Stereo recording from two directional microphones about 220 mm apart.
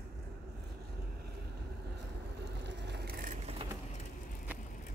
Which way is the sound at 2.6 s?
50° right (ahead or behind).